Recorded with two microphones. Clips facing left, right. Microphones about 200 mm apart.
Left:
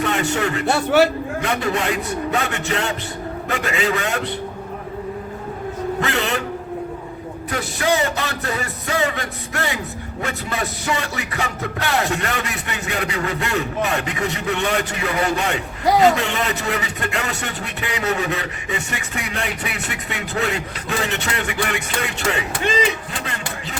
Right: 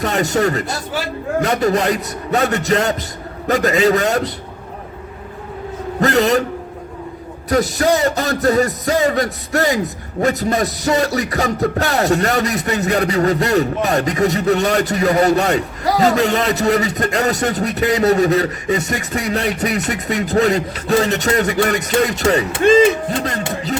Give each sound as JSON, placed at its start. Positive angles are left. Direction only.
{"t": 0.0, "sound": "speech", "side_deg": -40}
{"t": 0.7, "sound": "a man's voice", "side_deg": 65}
{"t": 1.4, "sound": "speech", "side_deg": -40}
{"t": 6.0, "sound": "speech", "side_deg": -40}
{"t": 7.5, "sound": "speech", "side_deg": -40}